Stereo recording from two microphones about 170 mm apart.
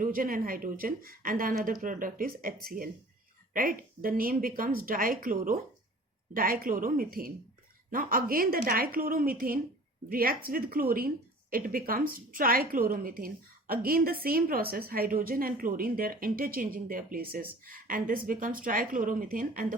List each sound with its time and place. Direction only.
0.0 s a woman's voice: 55° right (ahead or behind)